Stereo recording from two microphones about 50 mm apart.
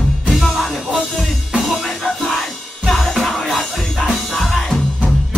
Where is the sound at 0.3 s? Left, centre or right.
Centre.